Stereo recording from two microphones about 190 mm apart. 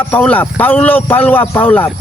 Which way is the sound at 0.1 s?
10° left (ahead or behind).